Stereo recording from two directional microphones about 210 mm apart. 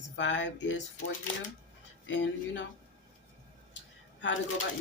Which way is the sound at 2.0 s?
60° left (ahead or behind).